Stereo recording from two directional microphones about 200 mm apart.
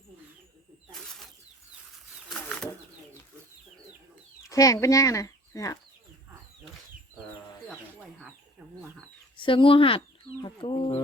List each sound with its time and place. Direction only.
2.3 s bird flight: 5° left (ahead or behind)
4.4 s speech: 15° left (ahead or behind)
9.4 s speech: 25° left (ahead or behind)